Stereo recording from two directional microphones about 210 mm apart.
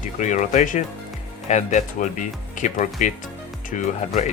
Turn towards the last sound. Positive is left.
turn(degrees=35)  # may be behind; listen again after turning